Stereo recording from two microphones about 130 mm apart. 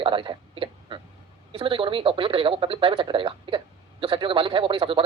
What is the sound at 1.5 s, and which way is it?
A man's voice, 40° right (ahead or behind).